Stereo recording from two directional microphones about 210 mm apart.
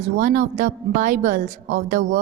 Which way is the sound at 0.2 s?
40° right (ahead or behind).